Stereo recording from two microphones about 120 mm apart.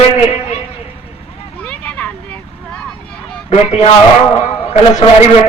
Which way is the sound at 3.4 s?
55° left (ahead or behind).